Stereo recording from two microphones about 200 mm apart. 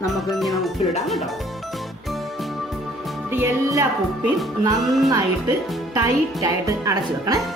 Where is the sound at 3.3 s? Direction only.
10° right (ahead or behind).